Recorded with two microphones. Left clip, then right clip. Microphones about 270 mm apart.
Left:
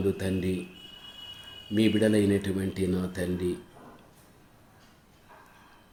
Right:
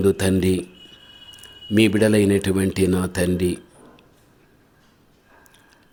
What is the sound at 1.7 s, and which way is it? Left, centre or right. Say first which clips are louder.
Speech: right 7 dB; right.